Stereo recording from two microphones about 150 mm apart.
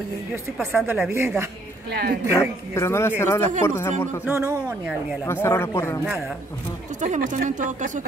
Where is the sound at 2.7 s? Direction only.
15° left (ahead or behind).